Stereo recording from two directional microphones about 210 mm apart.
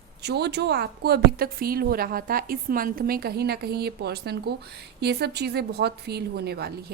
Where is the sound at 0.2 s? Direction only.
50° right (ahead or behind).